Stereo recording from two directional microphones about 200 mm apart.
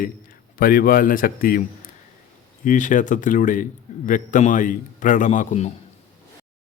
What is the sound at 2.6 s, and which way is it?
A man's voice, 40° left (ahead or behind).